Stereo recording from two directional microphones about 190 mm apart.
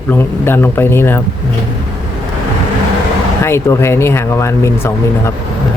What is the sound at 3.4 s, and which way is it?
Speech, 15° left (ahead or behind).